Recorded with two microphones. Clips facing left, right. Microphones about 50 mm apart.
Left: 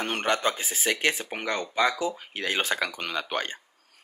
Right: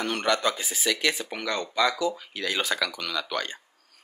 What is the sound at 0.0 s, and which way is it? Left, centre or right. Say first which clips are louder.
Speech: right 1 dB; left.